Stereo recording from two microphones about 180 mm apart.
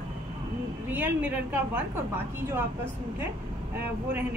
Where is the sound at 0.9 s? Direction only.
10° right (ahead or behind).